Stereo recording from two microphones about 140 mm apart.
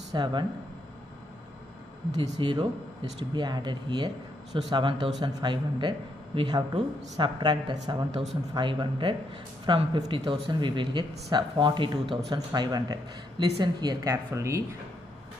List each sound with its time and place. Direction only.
0.1 s speech: 35° right (ahead or behind)
2.3 s speech: 35° right (ahead or behind)